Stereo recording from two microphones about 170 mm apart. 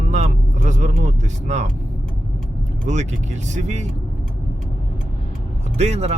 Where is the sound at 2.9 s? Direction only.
45° right (ahead or behind).